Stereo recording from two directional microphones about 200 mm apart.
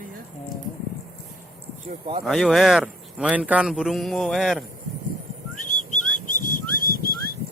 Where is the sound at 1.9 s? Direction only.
25° right (ahead or behind).